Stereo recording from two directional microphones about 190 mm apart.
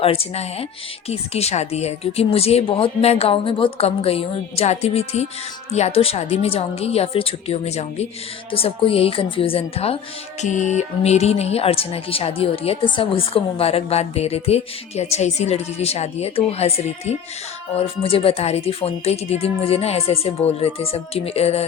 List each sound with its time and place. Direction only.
0.0 s a woman's voice: 30° left (ahead or behind)